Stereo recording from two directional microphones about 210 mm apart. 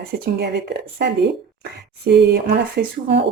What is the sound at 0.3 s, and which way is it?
Speech, 50° right (ahead or behind).